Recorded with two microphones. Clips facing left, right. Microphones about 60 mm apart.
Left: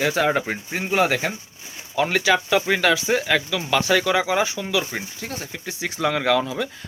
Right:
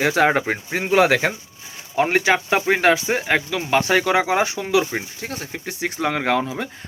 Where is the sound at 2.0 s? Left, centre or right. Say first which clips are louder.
Right 2 dB; right.